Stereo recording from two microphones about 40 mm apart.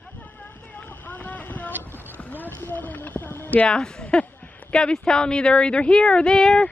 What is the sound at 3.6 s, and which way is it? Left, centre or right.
Speech, left.